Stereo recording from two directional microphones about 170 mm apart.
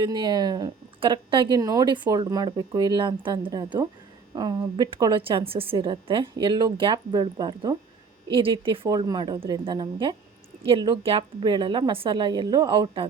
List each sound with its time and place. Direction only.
0.0 s speech: 25° right (ahead or behind)